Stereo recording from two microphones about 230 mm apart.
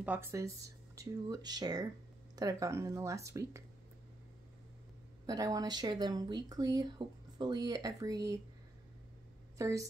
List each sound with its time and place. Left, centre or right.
0.0 s speech: centre
5.2 s speech: centre
9.6 s a woman's voice: centre